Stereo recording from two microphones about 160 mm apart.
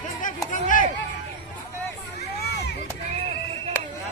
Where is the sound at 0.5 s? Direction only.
55° left (ahead or behind).